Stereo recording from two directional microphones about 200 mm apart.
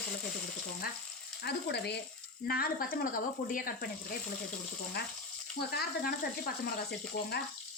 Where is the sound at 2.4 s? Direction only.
50° left (ahead or behind).